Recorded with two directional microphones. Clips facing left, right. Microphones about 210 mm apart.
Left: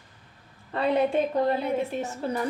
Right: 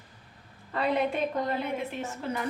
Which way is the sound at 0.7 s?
30° left (ahead or behind).